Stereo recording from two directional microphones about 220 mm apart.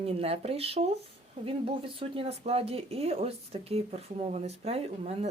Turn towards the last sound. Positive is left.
turn(degrees=-30)  # may be behind; listen again after turning